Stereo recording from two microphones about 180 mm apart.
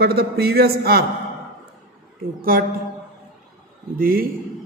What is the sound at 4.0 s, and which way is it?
Speech, 55° right (ahead or behind).